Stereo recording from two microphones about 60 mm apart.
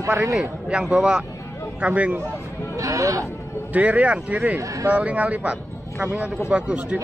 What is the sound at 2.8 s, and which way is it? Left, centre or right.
Speech, right.